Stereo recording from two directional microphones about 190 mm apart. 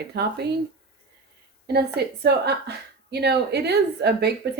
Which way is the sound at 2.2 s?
60° right (ahead or behind).